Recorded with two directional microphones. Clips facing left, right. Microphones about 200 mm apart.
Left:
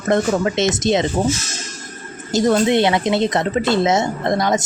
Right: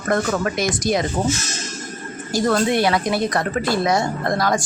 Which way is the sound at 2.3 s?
20° left (ahead or behind).